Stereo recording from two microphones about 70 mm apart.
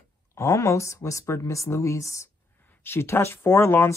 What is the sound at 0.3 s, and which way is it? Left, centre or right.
Speech, left.